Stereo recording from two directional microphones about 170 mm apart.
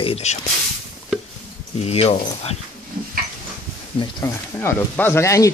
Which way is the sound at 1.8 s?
35° left (ahead or behind).